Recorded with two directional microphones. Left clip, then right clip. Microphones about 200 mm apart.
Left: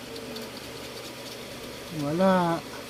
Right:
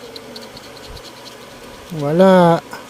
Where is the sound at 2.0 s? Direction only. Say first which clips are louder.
Right 13 dB; 60° right (ahead or behind).